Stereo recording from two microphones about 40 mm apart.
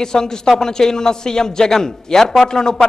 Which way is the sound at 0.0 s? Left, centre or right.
Centre.